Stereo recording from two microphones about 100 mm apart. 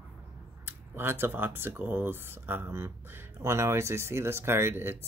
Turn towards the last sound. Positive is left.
turn(degrees=-25)  # may be behind; listen again after turning